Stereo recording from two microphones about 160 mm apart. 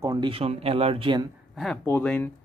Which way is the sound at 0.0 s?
20° right (ahead or behind).